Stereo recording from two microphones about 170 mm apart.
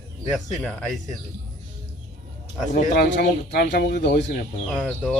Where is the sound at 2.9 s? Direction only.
65° left (ahead or behind).